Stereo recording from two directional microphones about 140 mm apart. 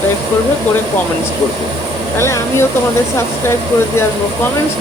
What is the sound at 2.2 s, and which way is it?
Speech, 20° left (ahead or behind).